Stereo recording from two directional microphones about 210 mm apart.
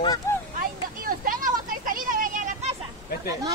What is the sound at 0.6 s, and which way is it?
Vehicle, 40° right (ahead or behind).